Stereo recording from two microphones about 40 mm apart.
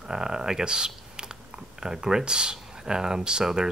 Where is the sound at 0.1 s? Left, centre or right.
Centre.